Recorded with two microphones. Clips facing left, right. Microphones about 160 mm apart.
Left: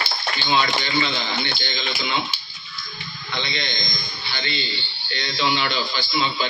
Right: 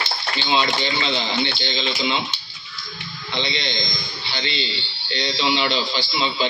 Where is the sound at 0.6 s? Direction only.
25° right (ahead or behind).